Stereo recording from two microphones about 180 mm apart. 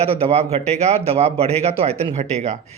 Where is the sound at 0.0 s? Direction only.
35° right (ahead or behind).